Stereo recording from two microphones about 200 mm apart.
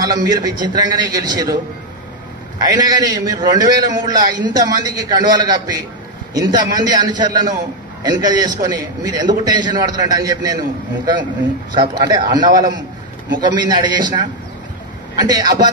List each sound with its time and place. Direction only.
0.0 s a man's voice: 20° right (ahead or behind)
2.8 s a man's voice: 20° right (ahead or behind)
11.7 s a man's voice: 20° right (ahead or behind)